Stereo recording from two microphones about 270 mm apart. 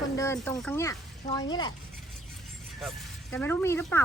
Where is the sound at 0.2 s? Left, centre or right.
Centre.